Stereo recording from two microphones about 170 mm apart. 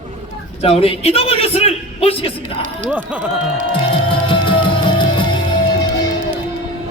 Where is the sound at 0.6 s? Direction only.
35° left (ahead or behind).